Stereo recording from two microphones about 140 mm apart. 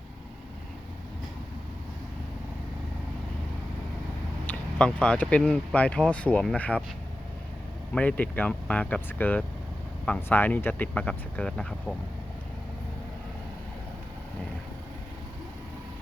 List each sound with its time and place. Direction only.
4.4 s speech: 10° left (ahead or behind)
7.9 s speech: 10° left (ahead or behind)